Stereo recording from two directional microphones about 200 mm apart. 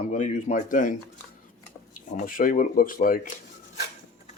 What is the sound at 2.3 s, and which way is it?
Speech, 45° left (ahead or behind).